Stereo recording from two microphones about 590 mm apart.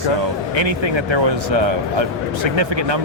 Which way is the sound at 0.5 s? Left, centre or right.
Right.